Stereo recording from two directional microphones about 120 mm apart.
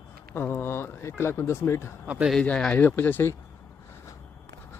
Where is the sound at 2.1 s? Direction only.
10° right (ahead or behind).